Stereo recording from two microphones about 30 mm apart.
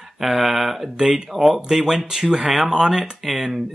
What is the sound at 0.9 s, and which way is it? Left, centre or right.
Speech, right.